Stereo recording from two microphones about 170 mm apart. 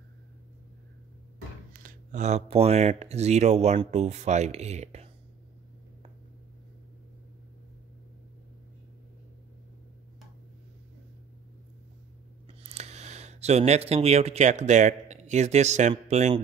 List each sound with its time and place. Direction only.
1.7 s speech: 55° right (ahead or behind)
12.4 s speech: 40° right (ahead or behind)